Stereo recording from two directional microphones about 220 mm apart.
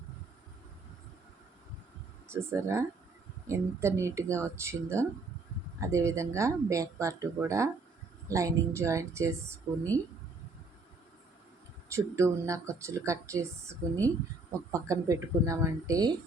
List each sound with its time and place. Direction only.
2.2 s speech: 10° right (ahead or behind)
11.9 s speech: 15° right (ahead or behind)